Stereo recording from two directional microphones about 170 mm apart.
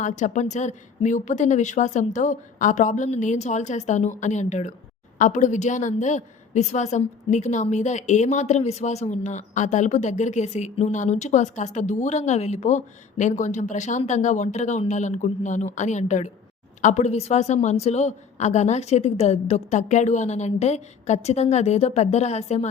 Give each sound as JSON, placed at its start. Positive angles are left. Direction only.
{"t": 0.0, "sound": "a woman's voice", "side_deg": 45}